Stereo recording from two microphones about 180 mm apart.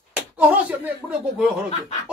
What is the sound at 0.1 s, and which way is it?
Slap, 10° right (ahead or behind).